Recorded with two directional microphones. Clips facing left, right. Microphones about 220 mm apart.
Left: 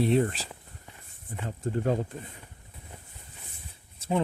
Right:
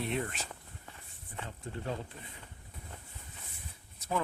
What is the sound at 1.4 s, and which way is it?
Speech, 45° left (ahead or behind).